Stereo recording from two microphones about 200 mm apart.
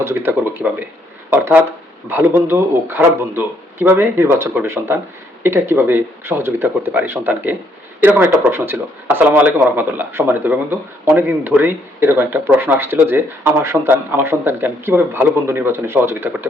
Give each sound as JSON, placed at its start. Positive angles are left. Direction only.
{"t": 0.0, "sound": "speech", "side_deg": -10}
{"t": 2.0, "sound": "speech", "side_deg": -10}